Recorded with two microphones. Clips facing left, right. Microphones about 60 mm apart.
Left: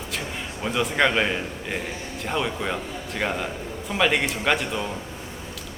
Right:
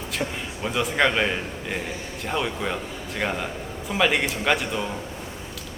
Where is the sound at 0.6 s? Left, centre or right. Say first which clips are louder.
Even; centre.